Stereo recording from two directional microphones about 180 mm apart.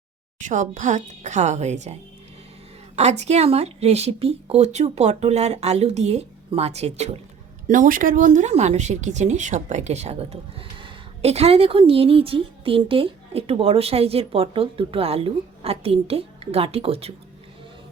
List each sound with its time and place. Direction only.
0.3 s speech: 45° right (ahead or behind)
7.7 s speech: 50° right (ahead or behind)